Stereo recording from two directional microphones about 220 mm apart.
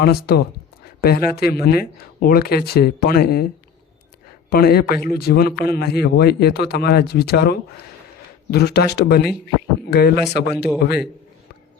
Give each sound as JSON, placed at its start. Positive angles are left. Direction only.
{"t": 0.0, "sound": "a man's voice", "side_deg": 45}